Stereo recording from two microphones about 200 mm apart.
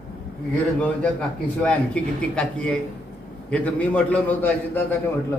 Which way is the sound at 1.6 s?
5° left (ahead or behind).